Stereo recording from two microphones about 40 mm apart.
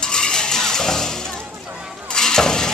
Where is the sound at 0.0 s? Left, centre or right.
Centre.